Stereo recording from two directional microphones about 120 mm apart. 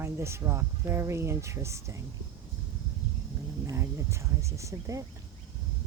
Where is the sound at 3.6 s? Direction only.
25° right (ahead or behind).